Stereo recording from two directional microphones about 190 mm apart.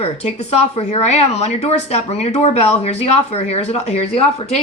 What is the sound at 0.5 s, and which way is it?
Speech, 35° left (ahead or behind).